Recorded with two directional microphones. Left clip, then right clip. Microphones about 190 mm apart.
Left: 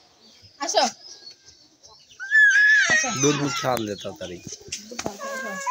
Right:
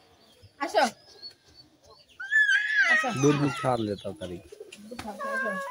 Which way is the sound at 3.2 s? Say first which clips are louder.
Left 2 dB; 25° left (ahead or behind).